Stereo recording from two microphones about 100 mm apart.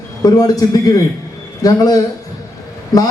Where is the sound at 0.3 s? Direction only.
40° left (ahead or behind).